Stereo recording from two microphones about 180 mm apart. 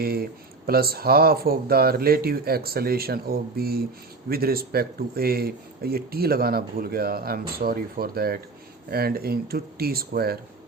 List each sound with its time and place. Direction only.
0.0 s speech: 55° right (ahead or behind)